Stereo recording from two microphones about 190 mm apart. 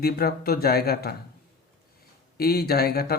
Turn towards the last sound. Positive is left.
turn(degrees=55)  # may be behind; listen again after turning